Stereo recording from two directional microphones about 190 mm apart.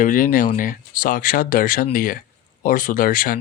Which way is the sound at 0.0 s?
45° left (ahead or behind).